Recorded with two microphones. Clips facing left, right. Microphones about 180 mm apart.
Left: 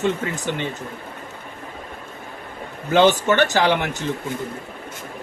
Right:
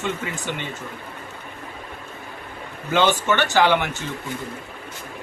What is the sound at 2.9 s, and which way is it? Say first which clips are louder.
Speech: left 4 dB; 40° left (ahead or behind).